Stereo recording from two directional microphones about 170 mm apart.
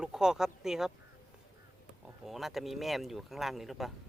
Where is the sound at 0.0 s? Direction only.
5° right (ahead or behind).